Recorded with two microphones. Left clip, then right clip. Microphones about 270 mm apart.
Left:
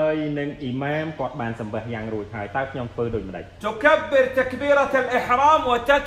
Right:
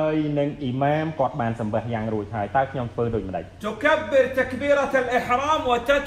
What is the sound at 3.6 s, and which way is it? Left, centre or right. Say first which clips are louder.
A man's voice: left 3 dB; centre.